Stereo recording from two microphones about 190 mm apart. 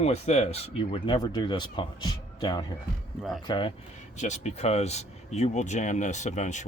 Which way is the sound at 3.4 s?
25° left (ahead or behind).